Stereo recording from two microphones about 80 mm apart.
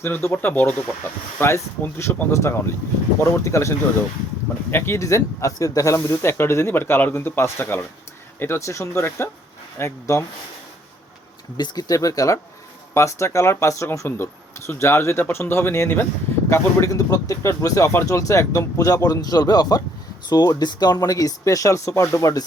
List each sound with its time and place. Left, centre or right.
0.0 s speech: left
11.5 s speech: left